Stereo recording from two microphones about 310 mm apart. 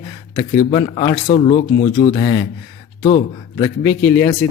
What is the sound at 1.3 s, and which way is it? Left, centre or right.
Speech, left.